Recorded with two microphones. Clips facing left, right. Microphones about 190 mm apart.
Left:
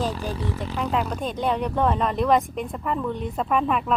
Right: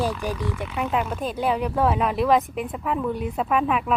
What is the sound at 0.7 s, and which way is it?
Speech, 5° right (ahead or behind).